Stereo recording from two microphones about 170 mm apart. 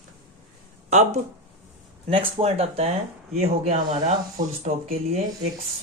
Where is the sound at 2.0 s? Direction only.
35° right (ahead or behind).